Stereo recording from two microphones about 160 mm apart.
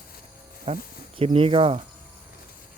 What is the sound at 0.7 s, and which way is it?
Speech, 40° right (ahead or behind).